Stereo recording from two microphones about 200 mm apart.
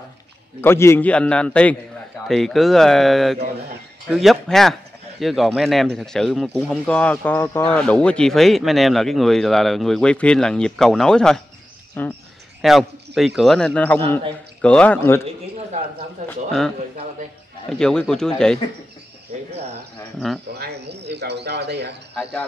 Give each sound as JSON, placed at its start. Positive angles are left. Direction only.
{"t": 0.6, "sound": "a man's voice", "side_deg": 10}
{"t": 16.3, "sound": "speech", "side_deg": 5}
{"t": 20.5, "sound": "speech", "side_deg": -55}